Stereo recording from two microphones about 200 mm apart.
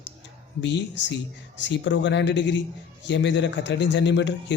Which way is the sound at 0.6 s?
60° left (ahead or behind).